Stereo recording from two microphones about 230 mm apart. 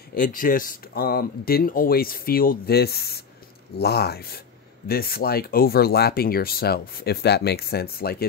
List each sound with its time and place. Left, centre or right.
0.1 s speech: left